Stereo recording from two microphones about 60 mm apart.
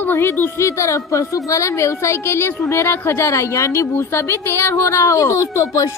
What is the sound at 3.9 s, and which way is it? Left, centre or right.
Speech, left.